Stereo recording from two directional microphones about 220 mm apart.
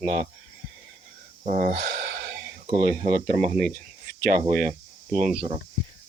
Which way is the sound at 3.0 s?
40° right (ahead or behind).